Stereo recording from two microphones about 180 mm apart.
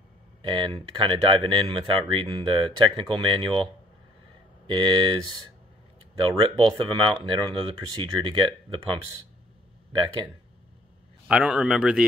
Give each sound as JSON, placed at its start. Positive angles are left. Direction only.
{"t": 0.4, "sound": "speech", "side_deg": -30}
{"t": 4.6, "sound": "speech", "side_deg": -25}
{"t": 6.2, "sound": "speech", "side_deg": -30}
{"t": 11.2, "sound": "a man's voice", "side_deg": -5}